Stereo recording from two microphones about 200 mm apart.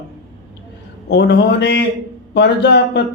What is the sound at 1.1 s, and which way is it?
Speech, 60° left (ahead or behind).